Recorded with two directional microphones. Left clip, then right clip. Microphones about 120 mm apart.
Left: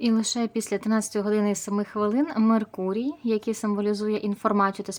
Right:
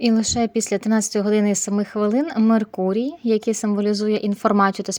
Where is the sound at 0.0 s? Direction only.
35° right (ahead or behind).